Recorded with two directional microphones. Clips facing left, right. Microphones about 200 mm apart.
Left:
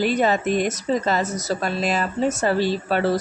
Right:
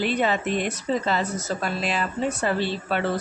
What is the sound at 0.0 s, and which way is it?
A woman's voice, 40° left (ahead or behind).